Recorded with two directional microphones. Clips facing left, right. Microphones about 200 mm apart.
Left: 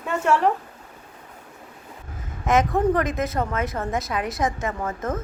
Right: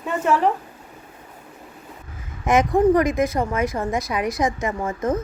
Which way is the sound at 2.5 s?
15° right (ahead or behind).